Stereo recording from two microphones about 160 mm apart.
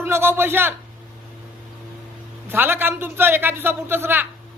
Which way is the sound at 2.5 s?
15° right (ahead or behind).